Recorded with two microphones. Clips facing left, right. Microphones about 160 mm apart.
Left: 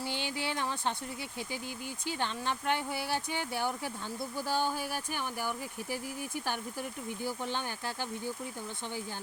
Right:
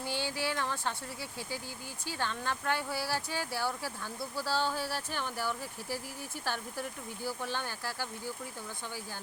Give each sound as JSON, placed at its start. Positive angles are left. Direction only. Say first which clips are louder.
{"t": 0.1, "sound": "speech", "louder": "right 1 dB", "side_deg": 20}
{"t": 2.0, "sound": "speech", "louder": "left 1 dB", "side_deg": 20}